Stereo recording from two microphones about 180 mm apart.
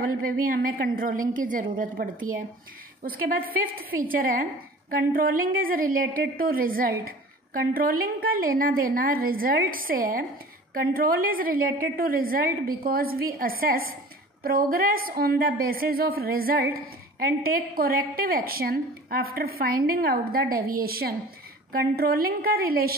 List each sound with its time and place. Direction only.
0.5 s a woman's voice: 50° right (ahead or behind)